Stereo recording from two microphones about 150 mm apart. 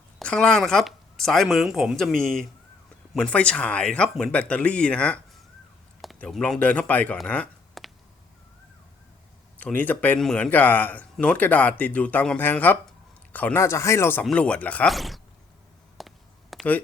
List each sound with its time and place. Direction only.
0.2 s speech: 5° left (ahead or behind)
9.6 s speech: 10° left (ahead or behind)
16.0 s a sound: centre (ahead or behind)